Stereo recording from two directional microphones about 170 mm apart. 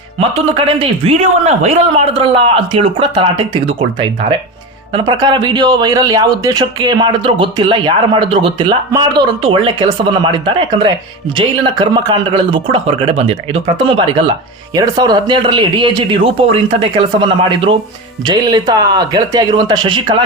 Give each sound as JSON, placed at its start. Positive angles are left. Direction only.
{"t": 0.2, "sound": "a man's voice", "side_deg": -35}
{"t": 4.9, "sound": "a man's voice", "side_deg": -25}
{"t": 14.8, "sound": "speech", "side_deg": -25}